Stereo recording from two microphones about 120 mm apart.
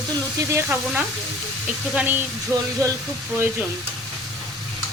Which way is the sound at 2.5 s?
25° right (ahead or behind).